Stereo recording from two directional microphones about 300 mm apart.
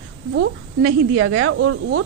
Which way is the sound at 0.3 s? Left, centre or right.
Right.